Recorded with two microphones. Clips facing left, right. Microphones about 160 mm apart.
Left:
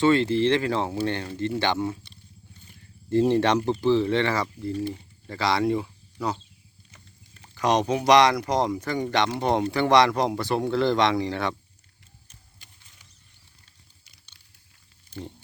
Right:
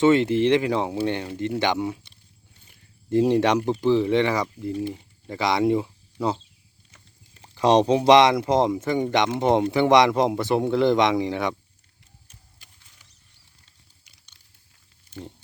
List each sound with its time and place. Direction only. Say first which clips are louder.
0.0 s speech: right 2 dB; 20° right (ahead or behind)